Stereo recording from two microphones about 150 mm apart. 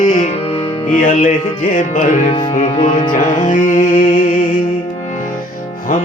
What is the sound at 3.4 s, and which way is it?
Music, 55° left (ahead or behind).